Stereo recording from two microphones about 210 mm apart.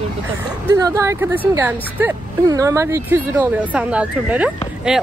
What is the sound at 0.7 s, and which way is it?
Speech, 15° right (ahead or behind).